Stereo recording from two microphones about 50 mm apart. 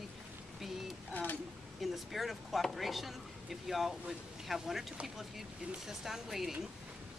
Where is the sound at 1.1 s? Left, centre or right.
Left.